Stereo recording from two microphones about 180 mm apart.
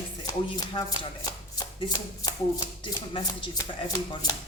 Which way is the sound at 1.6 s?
20° left (ahead or behind).